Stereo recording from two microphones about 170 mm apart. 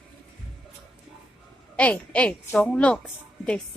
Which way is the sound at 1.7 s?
10° left (ahead or behind).